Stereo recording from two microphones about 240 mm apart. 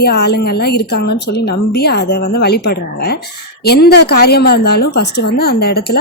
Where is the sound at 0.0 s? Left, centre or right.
Left.